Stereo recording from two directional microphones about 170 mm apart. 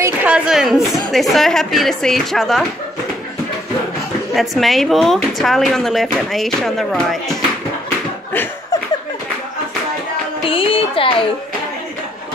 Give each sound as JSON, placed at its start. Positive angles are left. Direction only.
{"t": 0.0, "sound": "speech", "side_deg": -10}
{"t": 4.4, "sound": "speech", "side_deg": 0}
{"t": 10.4, "sound": "music", "side_deg": 30}